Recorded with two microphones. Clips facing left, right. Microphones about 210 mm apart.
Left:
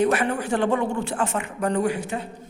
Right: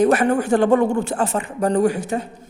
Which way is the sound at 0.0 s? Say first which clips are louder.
Right 5 dB; 45° right (ahead or behind).